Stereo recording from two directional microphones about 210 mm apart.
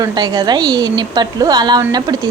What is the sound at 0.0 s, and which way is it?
Speech, 20° right (ahead or behind).